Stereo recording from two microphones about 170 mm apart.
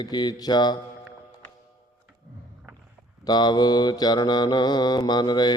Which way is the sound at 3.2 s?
25° left (ahead or behind).